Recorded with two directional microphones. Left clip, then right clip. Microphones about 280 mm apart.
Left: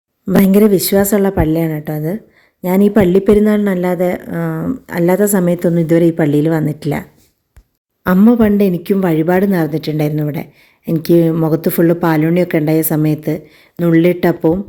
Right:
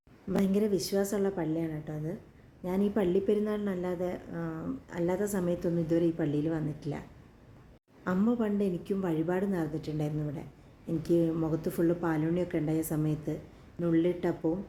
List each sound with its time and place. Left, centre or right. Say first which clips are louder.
0.4 s speech: left 18 dB; left
8.0 s speech: left 19 dB; left